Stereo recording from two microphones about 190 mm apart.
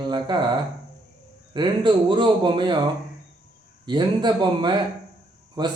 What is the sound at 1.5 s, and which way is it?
A man's voice, 25° right (ahead or behind).